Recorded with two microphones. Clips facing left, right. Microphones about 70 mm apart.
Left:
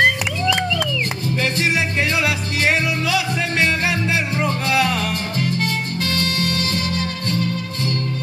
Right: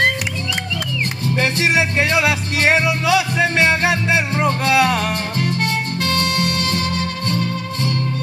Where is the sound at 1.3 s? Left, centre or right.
Right.